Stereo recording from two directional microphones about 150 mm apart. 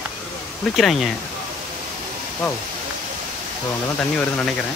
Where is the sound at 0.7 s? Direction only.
Centre (ahead or behind).